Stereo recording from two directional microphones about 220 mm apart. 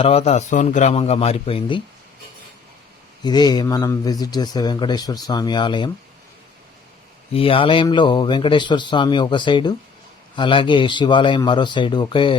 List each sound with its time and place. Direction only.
0.0 s speech: 25° left (ahead or behind)
3.2 s speech: 20° left (ahead or behind)
7.3 s speech: 25° left (ahead or behind)